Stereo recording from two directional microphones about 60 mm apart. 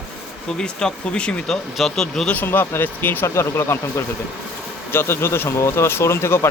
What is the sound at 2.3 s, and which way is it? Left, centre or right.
Speech, left.